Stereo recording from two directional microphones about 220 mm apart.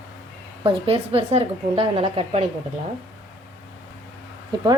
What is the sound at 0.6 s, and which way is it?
A woman's voice, 25° right (ahead or behind).